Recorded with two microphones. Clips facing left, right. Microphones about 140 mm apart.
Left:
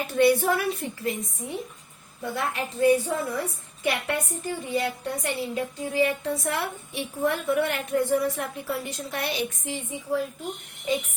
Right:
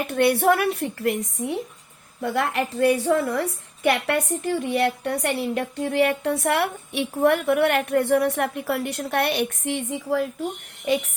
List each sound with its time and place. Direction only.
0.1 s a woman's voice: 65° right (ahead or behind)